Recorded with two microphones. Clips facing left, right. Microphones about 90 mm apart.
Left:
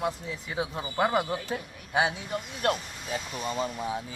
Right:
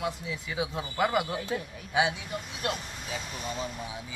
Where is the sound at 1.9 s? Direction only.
40° left (ahead or behind).